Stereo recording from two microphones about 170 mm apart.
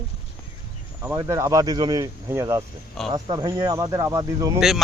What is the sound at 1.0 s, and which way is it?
Speech, 15° right (ahead or behind).